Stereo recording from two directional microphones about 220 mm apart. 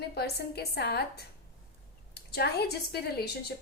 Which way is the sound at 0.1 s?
45° left (ahead or behind).